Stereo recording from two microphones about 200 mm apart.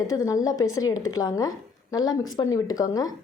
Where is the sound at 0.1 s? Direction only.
15° left (ahead or behind).